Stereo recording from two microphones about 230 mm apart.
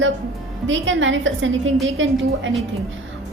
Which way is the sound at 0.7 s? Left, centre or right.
Right.